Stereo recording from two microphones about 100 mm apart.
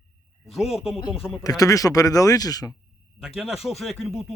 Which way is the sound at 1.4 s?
40° left (ahead or behind).